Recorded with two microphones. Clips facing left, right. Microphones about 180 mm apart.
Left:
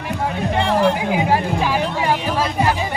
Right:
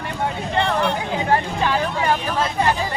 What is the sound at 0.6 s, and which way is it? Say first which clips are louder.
Music: left 4 dB; 10° left (ahead or behind).